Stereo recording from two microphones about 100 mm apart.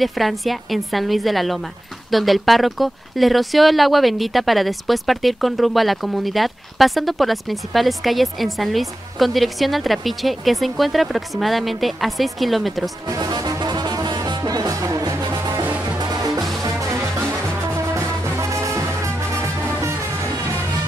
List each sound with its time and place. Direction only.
0.0 s speech: centre (ahead or behind)
13.1 s music: 40° right (ahead or behind)
15.6 s music: 15° right (ahead or behind)
16.0 s music: 40° right (ahead or behind)
17.9 s music: 30° right (ahead or behind)